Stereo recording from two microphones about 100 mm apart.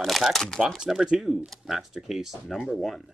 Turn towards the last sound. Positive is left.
turn(degrees=0)  # may be behind; listen again after turning